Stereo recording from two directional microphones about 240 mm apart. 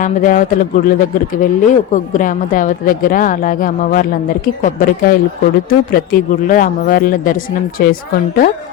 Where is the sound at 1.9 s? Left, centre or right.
Left.